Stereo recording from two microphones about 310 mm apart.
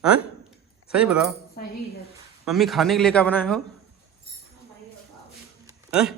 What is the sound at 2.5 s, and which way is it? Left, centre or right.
A man's voice, centre.